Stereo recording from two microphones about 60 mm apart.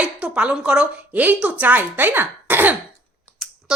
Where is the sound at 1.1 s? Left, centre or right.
Right.